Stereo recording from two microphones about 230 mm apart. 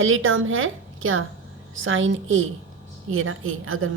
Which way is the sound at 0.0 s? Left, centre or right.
Right.